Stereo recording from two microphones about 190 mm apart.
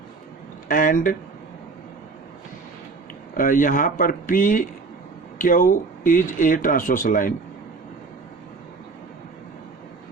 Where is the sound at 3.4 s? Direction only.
45° left (ahead or behind).